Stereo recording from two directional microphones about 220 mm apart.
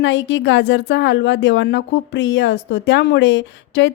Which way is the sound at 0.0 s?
55° left (ahead or behind).